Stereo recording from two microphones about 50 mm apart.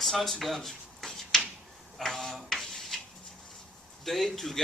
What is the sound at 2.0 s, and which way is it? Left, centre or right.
Tick-tock, centre.